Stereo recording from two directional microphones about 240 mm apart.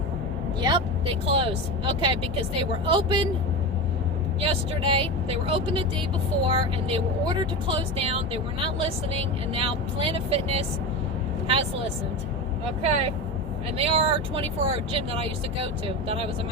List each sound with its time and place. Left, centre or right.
0.6 s speech: right
4.4 s speech: right
12.8 s speech: right